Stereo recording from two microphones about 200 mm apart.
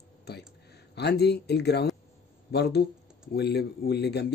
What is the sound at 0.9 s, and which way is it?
Speech, 55° left (ahead or behind).